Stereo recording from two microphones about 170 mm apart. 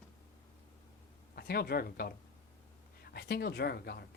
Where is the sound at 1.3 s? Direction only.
65° left (ahead or behind).